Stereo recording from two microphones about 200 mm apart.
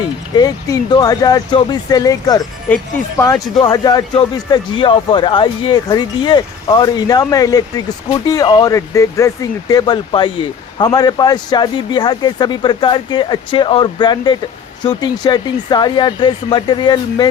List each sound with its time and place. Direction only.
0.3 s a man's voice: 20° left (ahead or behind)